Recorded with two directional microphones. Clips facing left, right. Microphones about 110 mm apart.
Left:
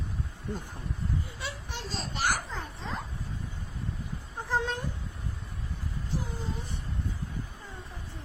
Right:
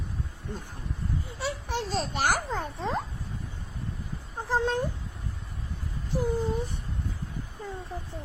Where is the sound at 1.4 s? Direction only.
50° right (ahead or behind).